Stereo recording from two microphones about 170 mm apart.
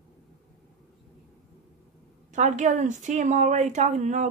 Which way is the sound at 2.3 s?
45° right (ahead or behind).